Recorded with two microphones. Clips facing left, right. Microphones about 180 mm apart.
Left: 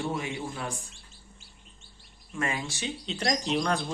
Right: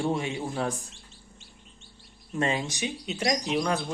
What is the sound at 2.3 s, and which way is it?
Speech, 25° right (ahead or behind).